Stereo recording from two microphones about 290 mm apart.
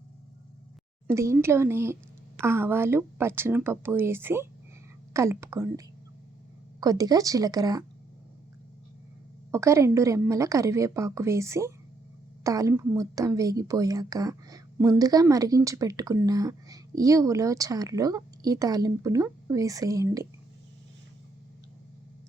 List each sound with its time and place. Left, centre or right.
1.0 s a woman's voice: centre
9.5 s a woman's voice: centre